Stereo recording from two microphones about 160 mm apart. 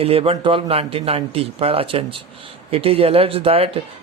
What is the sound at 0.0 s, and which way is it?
A man's voice, 40° right (ahead or behind).